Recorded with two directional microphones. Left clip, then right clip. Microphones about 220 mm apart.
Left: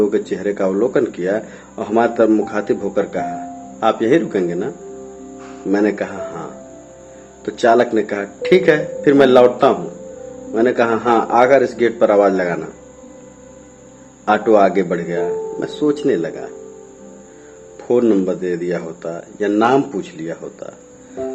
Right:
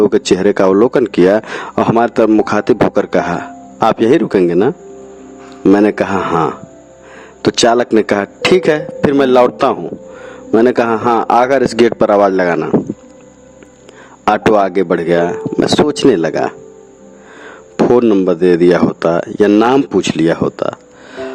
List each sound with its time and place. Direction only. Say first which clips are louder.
0.1 s speech: right 8 dB; 50° right (ahead or behind)
5.7 s speech: right 5 dB; 50° right (ahead or behind)
7.5 s speech: right 2 dB; 55° right (ahead or behind)
14.3 s speech: even; 55° right (ahead or behind)
17.9 s speech: right 2 dB; 50° right (ahead or behind)